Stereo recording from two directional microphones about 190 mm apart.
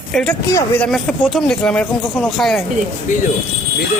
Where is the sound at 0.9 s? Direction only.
Centre (ahead or behind).